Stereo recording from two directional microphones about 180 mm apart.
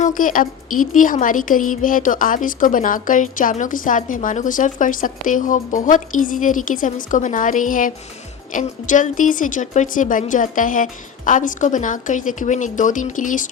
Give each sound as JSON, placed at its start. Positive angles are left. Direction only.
{"t": 0.0, "sound": "a woman's voice", "side_deg": 50}